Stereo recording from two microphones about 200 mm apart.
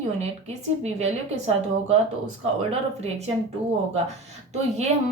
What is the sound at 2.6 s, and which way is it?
Speech, 30° right (ahead or behind).